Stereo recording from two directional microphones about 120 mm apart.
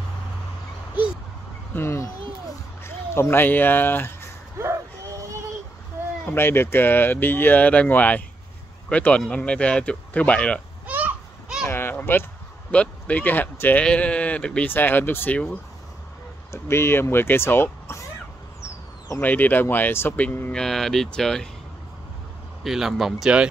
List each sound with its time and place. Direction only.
1.7 s speech: 20° left (ahead or behind)
4.6 s a sound: 25° right (ahead or behind)
6.2 s speech: 20° left (ahead or behind)
10.9 s a sound: 15° right (ahead or behind)
11.6 s a sound: 20° left (ahead or behind)
12.7 s speech: 10° left (ahead or behind)
16.6 s speech: 20° left (ahead or behind)
19.0 s speech: 15° left (ahead or behind)
20.6 s speech: 5° left (ahead or behind)
22.6 s speech: 5° right (ahead or behind)